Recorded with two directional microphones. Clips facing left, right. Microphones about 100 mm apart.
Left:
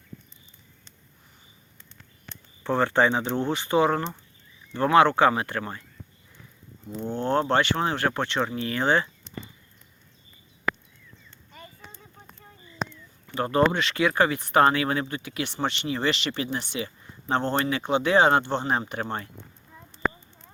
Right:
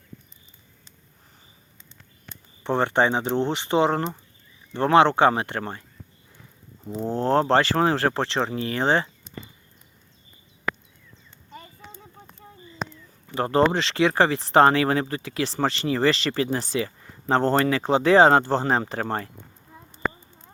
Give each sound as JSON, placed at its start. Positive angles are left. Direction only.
{"t": 2.6, "sound": "speech", "side_deg": -25}
{"t": 7.0, "sound": "speech", "side_deg": -35}
{"t": 12.9, "sound": "speech", "side_deg": -30}